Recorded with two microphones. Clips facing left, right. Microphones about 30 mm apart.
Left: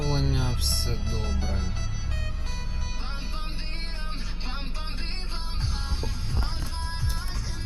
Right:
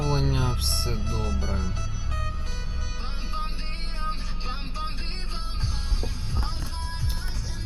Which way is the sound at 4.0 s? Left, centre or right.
Centre.